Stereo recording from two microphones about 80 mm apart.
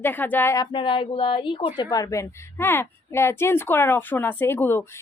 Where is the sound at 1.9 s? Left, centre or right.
Left.